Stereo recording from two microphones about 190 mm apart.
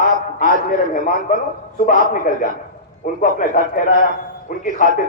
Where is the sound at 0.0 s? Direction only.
45° left (ahead or behind).